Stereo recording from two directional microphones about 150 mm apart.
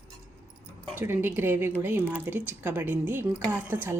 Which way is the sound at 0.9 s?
15° right (ahead or behind).